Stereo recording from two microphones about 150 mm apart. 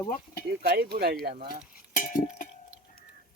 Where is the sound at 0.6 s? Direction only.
90° right; by 1.5 s 70° right (ahead or behind).